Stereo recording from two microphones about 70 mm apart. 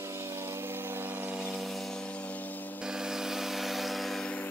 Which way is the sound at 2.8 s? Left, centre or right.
Centre.